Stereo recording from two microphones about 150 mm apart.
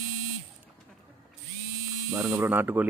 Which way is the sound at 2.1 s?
20° right (ahead or behind).